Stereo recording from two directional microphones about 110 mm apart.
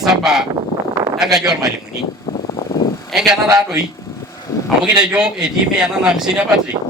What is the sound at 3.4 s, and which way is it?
Speech, 35° right (ahead or behind).